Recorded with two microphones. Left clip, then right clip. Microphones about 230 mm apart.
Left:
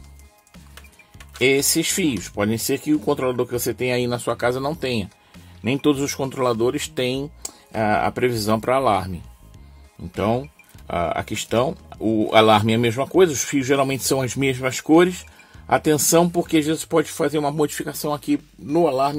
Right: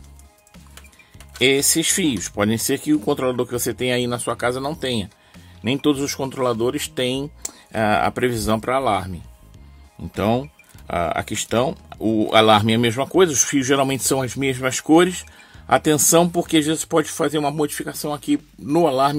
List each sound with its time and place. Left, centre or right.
1.4 s speech: centre
10.1 s speech: centre
18.7 s speech: centre